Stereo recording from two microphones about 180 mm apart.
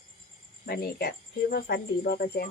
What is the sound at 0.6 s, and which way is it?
Speech, 60° left (ahead or behind).